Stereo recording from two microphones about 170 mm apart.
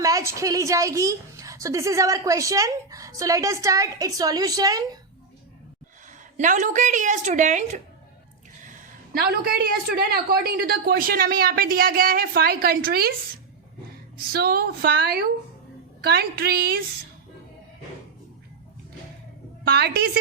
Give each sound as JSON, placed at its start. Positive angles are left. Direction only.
{"t": 0.0, "sound": "a woman's voice", "side_deg": -20}
{"t": 6.3, "sound": "a woman's voice", "side_deg": -45}
{"t": 9.1, "sound": "a woman's voice", "side_deg": -65}
{"t": 14.2, "sound": "a woman's voice", "side_deg": -65}
{"t": 19.6, "sound": "a woman's voice", "side_deg": -75}